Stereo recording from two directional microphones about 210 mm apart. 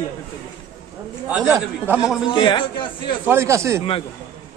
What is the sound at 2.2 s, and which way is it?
Speech, 20° left (ahead or behind).